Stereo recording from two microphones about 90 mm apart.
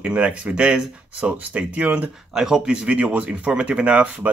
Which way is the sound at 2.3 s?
5° right (ahead or behind).